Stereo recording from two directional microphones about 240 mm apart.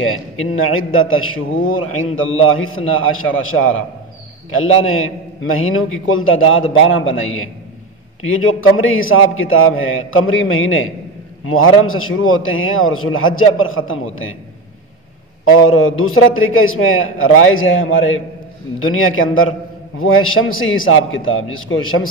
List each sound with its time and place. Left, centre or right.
0.0 s a man's voice: left
4.6 s a man's voice: left
15.4 s a man's voice: left